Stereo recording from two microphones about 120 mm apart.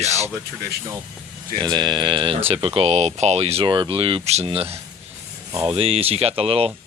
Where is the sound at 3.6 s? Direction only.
40° right (ahead or behind).